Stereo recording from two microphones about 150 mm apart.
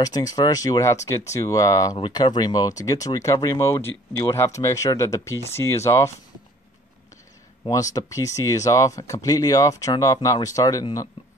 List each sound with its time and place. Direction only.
0.0 s speech: 25° left (ahead or behind)
7.9 s speech: 20° left (ahead or behind)